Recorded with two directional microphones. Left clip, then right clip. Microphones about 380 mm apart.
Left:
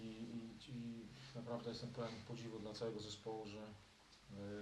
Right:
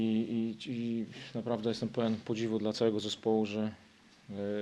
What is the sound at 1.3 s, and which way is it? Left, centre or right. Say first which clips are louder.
Speech: right 14 dB; right.